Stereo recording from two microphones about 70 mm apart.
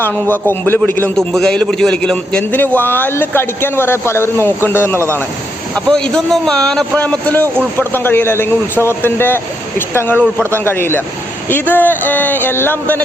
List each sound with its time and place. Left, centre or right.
0.0 s a sound: left
1.1 s a man's voice: centre
2.4 s speech: left
5.7 s a man's voice: centre; by 10.2 s left
10.3 s speech: right
10.6 s speech: left
11.7 s a sound: left